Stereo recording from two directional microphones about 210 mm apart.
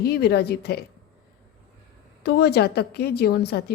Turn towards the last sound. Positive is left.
turn(degrees=50)  # may be behind; listen again after turning